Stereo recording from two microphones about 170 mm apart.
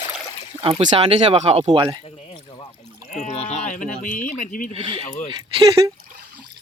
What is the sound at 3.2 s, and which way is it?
Speech, 40° left (ahead or behind).